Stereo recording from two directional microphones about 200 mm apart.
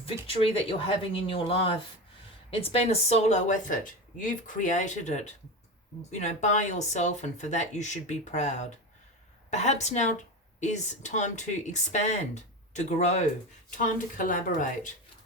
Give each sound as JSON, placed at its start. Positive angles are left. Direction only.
{"t": 0.0, "sound": "speech", "side_deg": 30}